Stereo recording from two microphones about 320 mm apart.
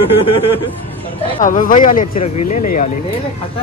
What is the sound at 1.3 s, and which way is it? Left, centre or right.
Speech, left.